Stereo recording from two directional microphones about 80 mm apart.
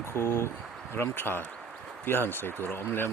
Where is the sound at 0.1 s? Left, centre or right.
Left.